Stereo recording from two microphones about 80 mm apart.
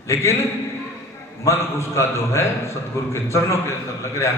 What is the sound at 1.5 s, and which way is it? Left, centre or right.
A man's voice, left.